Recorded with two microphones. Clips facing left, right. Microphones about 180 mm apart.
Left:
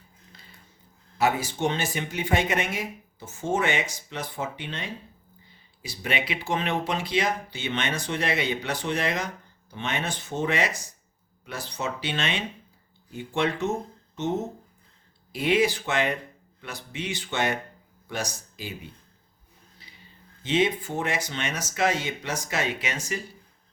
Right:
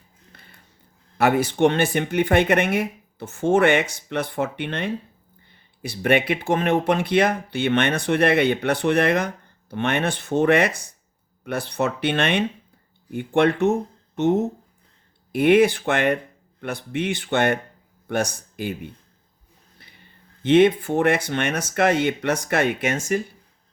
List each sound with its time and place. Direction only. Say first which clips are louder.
0.3 s a sound: right 2 dB; 55° right (ahead or behind)
1.2 s speech: right 7 dB; 65° right (ahead or behind)
15.3 s speech: right 7 dB; 60° right (ahead or behind)